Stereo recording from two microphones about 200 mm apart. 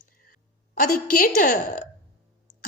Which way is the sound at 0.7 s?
45° left (ahead or behind).